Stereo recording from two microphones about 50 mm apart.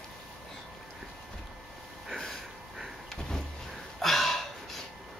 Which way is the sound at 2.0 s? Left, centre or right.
Centre.